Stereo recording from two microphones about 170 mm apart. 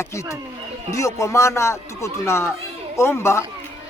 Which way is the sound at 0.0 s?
15° left (ahead or behind).